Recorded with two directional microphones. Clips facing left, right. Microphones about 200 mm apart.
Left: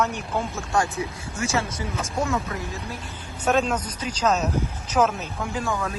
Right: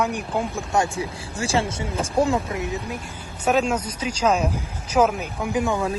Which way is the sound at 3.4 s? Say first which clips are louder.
Right 1 dB; 10° right (ahead or behind).